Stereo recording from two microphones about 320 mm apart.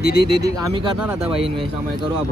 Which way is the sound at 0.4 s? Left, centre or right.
Centre.